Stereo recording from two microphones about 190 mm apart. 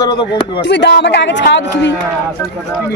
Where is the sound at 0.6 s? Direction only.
65° left (ahead or behind).